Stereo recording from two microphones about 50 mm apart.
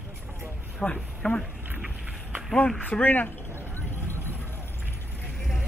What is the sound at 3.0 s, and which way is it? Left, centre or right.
Speech, left.